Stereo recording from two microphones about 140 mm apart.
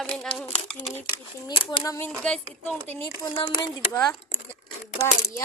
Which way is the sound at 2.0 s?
5° left (ahead or behind).